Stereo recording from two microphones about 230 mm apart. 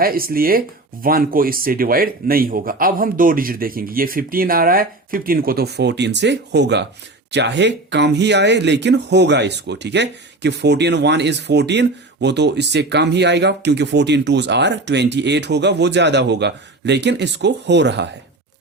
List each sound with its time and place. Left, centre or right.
0.0 s speech: right